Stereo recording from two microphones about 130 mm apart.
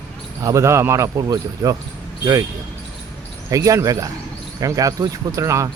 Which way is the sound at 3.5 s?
25° right (ahead or behind).